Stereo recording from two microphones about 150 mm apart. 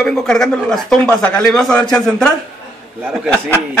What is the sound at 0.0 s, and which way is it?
Speech, 5° left (ahead or behind).